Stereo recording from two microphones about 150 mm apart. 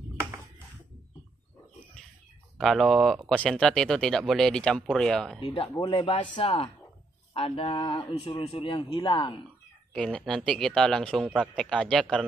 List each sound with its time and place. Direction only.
2.5 s speech: centre (ahead or behind)
5.4 s a man's voice: 35° left (ahead or behind)
9.9 s speech: 5° left (ahead or behind)